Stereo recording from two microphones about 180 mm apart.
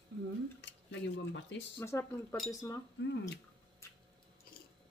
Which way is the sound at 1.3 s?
75° left (ahead or behind).